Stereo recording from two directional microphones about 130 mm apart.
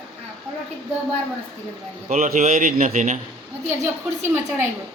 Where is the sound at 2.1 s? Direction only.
80° right.